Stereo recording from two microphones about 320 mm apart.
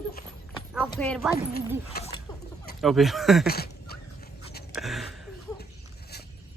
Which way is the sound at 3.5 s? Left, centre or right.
Left.